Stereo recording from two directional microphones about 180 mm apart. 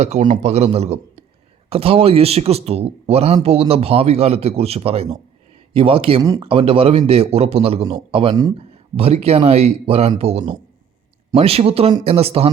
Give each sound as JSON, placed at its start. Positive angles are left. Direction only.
{"t": 0.0, "sound": "speech", "side_deg": -40}